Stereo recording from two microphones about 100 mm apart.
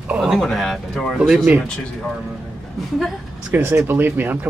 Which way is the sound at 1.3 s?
15° right (ahead or behind).